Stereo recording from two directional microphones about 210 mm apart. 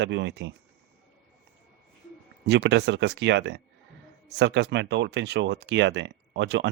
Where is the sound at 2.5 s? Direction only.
55° right (ahead or behind).